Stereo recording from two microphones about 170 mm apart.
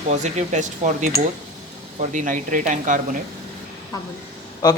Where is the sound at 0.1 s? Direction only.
40° right (ahead or behind).